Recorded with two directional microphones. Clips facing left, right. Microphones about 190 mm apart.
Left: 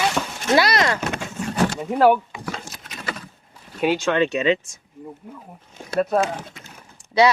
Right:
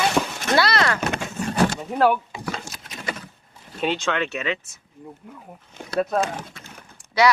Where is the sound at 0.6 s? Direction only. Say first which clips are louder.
Left 1 dB; 20° left (ahead or behind).